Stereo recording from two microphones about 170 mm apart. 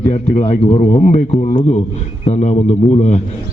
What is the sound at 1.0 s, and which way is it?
A man's voice, 40° left (ahead or behind).